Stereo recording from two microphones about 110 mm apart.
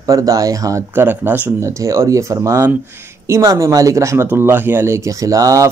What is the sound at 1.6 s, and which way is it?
Speech, 25° right (ahead or behind).